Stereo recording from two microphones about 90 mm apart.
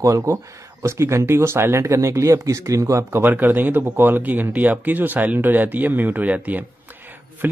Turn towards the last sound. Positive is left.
turn(degrees=-20)  # may be behind; listen again after turning